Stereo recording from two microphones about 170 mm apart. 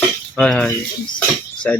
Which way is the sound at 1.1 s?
10° left (ahead or behind).